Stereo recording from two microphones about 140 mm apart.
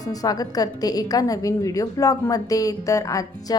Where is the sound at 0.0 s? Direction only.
25° left (ahead or behind).